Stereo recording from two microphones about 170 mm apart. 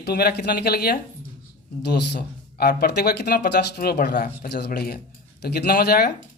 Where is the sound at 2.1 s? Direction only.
65° left (ahead or behind).